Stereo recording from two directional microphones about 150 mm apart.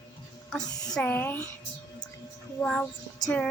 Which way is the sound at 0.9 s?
15° left (ahead or behind).